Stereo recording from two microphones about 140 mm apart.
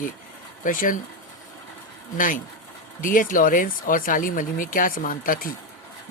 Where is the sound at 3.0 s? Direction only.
75° left (ahead or behind).